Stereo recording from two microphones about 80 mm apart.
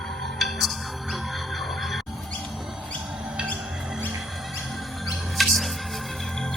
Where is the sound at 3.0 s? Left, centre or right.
Centre.